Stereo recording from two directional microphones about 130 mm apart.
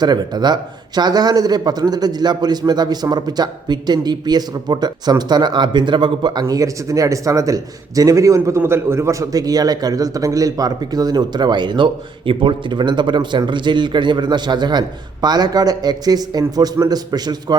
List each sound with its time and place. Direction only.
0.0 s a man's voice: 35° right (ahead or behind)
6.4 s a man's voice: 25° right (ahead or behind)